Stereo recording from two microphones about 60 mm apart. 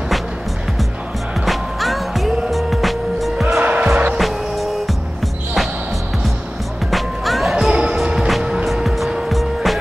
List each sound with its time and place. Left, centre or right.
1.4 s music: centre
3.6 s music: right
4.2 s music: centre
6.9 s music: centre
7.7 s music: centre
8.8 s music: centre